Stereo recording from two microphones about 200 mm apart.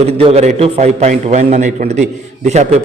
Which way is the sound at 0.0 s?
30° right (ahead or behind).